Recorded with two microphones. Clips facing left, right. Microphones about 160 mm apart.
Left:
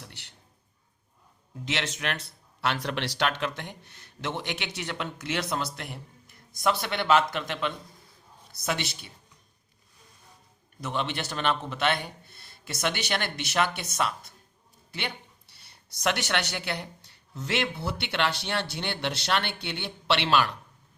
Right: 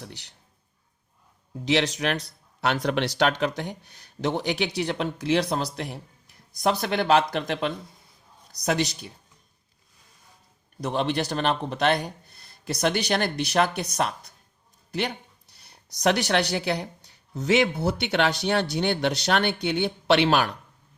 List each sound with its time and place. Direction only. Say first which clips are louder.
0.0 s a sound: right 7 dB; 40° right (ahead or behind)
1.6 s speech: right 8 dB; 35° right (ahead or behind)
10.8 s speech: right 6 dB; 35° right (ahead or behind)
15.9 s speech: right 6 dB; 40° right (ahead or behind)